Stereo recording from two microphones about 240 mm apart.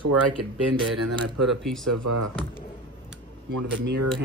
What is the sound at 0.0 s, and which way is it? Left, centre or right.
Speech, right.